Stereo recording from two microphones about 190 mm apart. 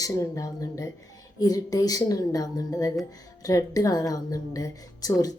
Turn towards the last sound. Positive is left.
turn(degrees=20)  # may be behind; listen again after turning